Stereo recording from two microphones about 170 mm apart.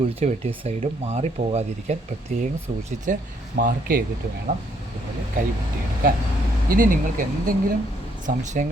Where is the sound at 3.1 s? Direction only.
50° right (ahead or behind).